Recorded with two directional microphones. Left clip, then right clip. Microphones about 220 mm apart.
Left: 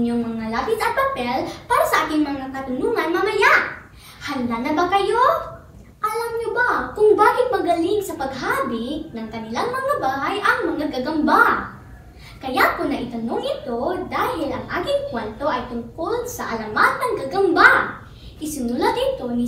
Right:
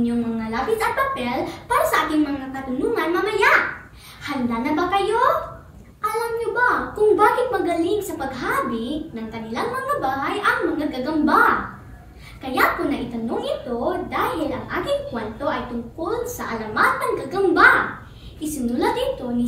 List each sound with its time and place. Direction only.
0.0 s a child's voice: centre (ahead or behind)